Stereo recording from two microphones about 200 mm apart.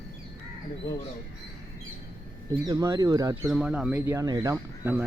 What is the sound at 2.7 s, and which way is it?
Speech, 20° right (ahead or behind).